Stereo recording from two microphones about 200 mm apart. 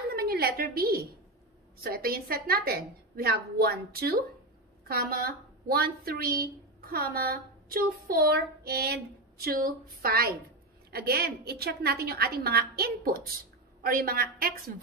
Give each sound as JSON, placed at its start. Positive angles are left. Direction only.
{"t": 0.1, "sound": "a woman's voice", "side_deg": -50}